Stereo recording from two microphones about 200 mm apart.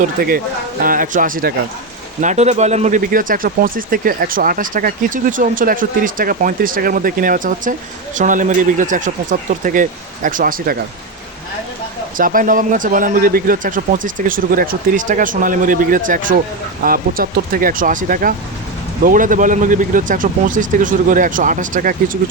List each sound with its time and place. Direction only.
0.2 s speech: 50° right (ahead or behind)
12.1 s speech: 45° right (ahead or behind)